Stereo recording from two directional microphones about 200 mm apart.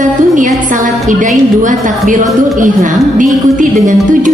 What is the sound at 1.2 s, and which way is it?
A woman's voice, 40° right (ahead or behind).